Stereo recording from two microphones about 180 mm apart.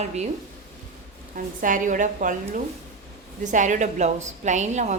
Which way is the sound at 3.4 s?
45° right (ahead or behind).